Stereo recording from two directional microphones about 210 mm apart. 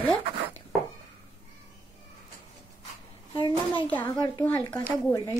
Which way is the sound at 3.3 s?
25° left (ahead or behind).